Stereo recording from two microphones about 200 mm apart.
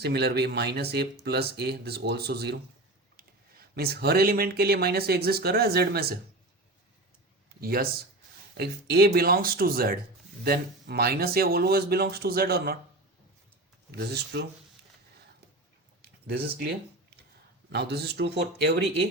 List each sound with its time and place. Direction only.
0.0 s speech: 55° right (ahead or behind)
7.6 s speech: 50° right (ahead or behind)
13.9 s speech: 55° right (ahead or behind)
16.3 s speech: 50° right (ahead or behind)
17.7 s speech: 55° right (ahead or behind)